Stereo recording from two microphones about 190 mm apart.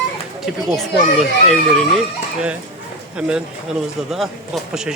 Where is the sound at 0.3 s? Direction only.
Centre (ahead or behind).